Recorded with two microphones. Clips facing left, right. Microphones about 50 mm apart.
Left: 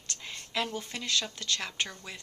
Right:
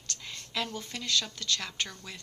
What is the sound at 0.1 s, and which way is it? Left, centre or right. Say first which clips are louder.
A woman's voice: left 1 dB; left.